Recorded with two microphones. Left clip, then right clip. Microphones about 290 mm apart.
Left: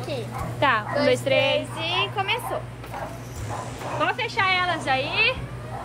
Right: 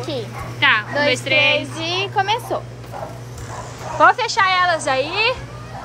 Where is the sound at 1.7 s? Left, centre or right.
Right.